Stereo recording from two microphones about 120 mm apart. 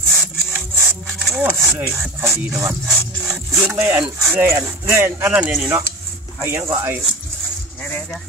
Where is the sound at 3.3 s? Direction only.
15° right (ahead or behind).